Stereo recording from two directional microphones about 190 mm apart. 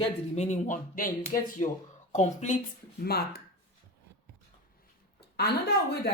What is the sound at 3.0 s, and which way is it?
Speech, 55° left (ahead or behind).